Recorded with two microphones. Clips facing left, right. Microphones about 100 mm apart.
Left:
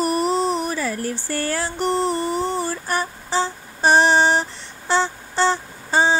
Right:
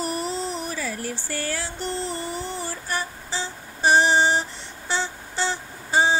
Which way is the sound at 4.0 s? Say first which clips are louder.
Left 3 dB; 75° left (ahead or behind).